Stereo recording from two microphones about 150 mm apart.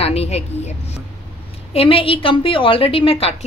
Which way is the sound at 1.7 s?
40° left (ahead or behind).